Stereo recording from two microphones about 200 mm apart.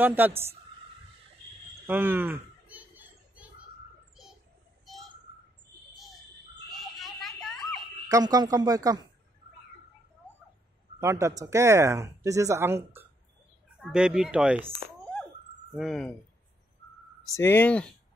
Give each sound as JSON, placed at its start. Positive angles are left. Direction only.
{"t": 0.0, "sound": "speech", "side_deg": -10}
{"t": 1.9, "sound": "children playing", "side_deg": -10}
{"t": 6.8, "sound": "a sound", "side_deg": 0}
{"t": 8.1, "sound": "speech", "side_deg": -20}
{"t": 11.0, "sound": "speech", "side_deg": -15}
{"t": 15.7, "sound": "speech", "side_deg": 0}
{"t": 17.4, "sound": "speech", "side_deg": 10}